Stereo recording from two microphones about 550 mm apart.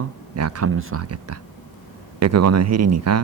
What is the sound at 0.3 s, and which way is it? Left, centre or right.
Speech, right.